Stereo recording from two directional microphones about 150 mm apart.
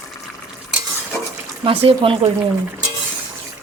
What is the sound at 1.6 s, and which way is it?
Speech, 35° right (ahead or behind).